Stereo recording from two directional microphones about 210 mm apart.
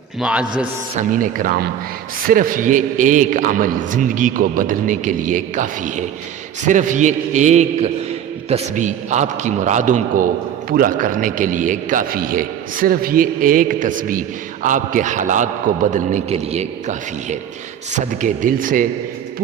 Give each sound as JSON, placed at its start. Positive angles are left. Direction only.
{"t": 0.2, "sound": "a man's voice", "side_deg": -5}
{"t": 0.9, "sound": "a man's voice", "side_deg": -40}